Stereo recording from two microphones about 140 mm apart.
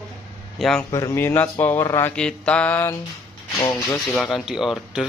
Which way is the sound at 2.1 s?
10° left (ahead or behind).